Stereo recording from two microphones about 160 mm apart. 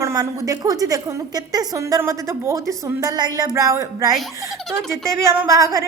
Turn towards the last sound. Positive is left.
turn(degrees=-20)  # may be behind; listen again after turning